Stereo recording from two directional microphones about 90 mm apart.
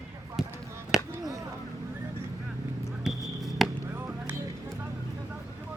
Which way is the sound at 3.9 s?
20° right (ahead or behind).